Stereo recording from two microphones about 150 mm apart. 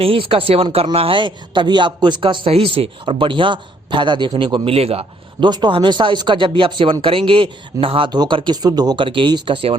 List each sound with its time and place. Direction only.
0.0 s speech: 40° right (ahead or behind)